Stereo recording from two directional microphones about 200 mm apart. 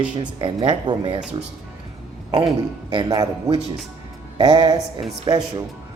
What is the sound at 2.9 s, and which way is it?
A man's voice, 20° right (ahead or behind).